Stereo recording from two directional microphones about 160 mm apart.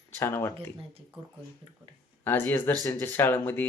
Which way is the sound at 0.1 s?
15° left (ahead or behind).